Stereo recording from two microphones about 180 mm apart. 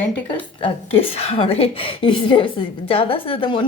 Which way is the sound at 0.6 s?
35° left (ahead or behind).